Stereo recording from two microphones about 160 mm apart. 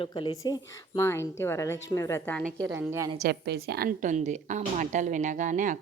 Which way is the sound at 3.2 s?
90° right.